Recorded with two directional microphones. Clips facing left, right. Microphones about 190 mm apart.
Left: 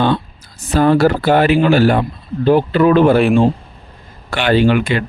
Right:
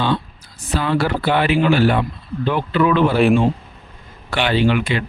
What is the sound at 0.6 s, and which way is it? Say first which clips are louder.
Speech: left 8 dB; 45° left (ahead or behind).